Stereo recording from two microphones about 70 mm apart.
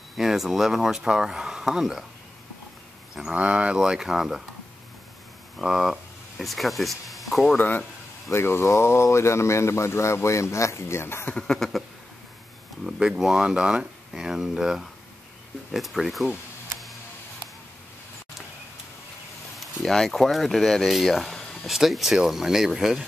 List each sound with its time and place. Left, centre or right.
0.2 s speech: centre
3.2 s speech: centre
5.6 s speech: centre
7.5 s speech: left
8.3 s speech: left
11.3 s speech: centre
12.8 s speech: centre
19.6 s speech: centre